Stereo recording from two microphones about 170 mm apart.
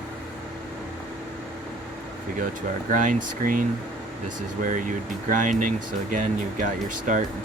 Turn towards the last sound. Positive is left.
turn(degrees=-50)  # may be behind; listen again after turning